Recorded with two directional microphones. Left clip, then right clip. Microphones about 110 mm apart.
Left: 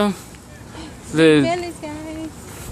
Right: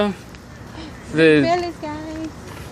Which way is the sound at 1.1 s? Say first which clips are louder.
Even; 55° left (ahead or behind).